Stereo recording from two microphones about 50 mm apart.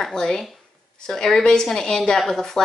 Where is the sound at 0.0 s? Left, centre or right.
Centre.